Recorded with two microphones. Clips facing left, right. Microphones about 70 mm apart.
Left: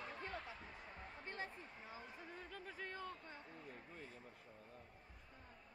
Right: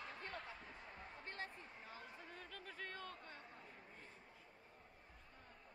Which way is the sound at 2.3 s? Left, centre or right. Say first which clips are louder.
Left 2 dB; centre.